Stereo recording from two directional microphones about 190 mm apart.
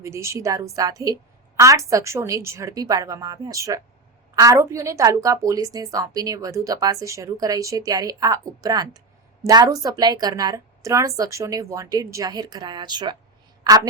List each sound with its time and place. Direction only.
0.0 s a woman's voice: 15° right (ahead or behind)